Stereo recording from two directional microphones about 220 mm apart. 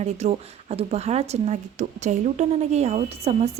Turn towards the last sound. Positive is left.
turn(degrees=-30)  # may be behind; listen again after turning